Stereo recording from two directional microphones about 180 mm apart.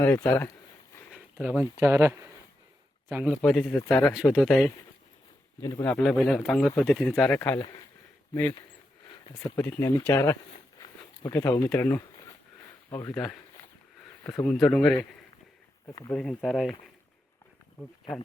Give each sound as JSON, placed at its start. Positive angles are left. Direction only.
{"t": 0.0, "sound": "speech", "side_deg": 15}
{"t": 1.4, "sound": "speech", "side_deg": -5}
{"t": 3.4, "sound": "speech", "side_deg": 5}
{"t": 5.5, "sound": "speech", "side_deg": 15}
{"t": 7.6, "sound": "speech", "side_deg": 25}
{"t": 8.3, "sound": "speech", "side_deg": 10}
{"t": 9.0, "sound": "a sound", "side_deg": 30}
{"t": 9.4, "sound": "speech", "side_deg": 15}
{"t": 10.8, "sound": "a sound", "side_deg": 20}
{"t": 13.1, "sound": "speech", "side_deg": 5}
{"t": 14.3, "sound": "speech", "side_deg": 15}
{"t": 14.5, "sound": "speech", "side_deg": 5}
{"t": 15.9, "sound": "speech", "side_deg": 15}
{"t": 16.1, "sound": "speech", "side_deg": 5}